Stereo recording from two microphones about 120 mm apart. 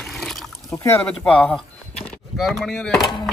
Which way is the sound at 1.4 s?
5° left (ahead or behind).